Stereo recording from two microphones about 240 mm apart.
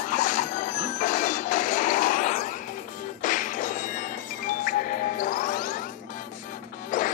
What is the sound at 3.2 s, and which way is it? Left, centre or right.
Music, left.